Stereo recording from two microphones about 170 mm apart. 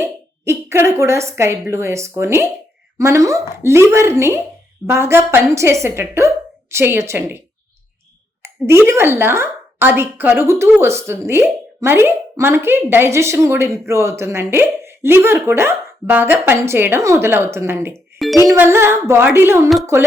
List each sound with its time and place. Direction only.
0.0 s speech: 15° right (ahead or behind)
18.2 s music: centre (ahead or behind)
18.5 s speech: 15° right (ahead or behind)